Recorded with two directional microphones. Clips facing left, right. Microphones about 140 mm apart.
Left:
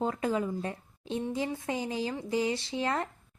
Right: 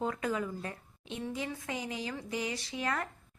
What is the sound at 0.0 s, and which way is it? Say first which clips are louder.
Speech: left 4 dB; 30° left (ahead or behind).